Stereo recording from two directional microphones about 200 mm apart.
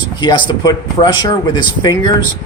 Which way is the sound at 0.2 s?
25° left (ahead or behind).